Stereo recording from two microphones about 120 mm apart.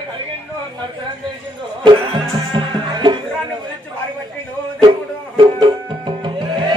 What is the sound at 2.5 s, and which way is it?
Music, 40° right (ahead or behind).